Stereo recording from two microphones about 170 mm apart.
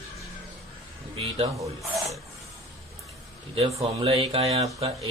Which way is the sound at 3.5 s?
30° right (ahead or behind).